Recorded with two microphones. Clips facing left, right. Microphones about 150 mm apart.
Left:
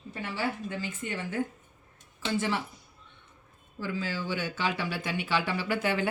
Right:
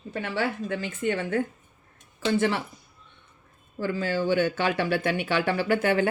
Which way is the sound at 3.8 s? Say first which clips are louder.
Right 7 dB; 55° right (ahead or behind).